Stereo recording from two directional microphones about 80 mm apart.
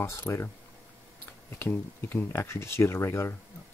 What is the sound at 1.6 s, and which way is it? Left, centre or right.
Speech, left.